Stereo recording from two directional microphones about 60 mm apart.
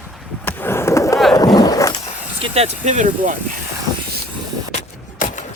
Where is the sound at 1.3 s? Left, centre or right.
Left.